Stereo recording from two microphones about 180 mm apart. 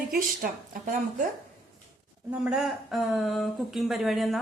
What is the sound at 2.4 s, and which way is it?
Speech, 5° right (ahead or behind).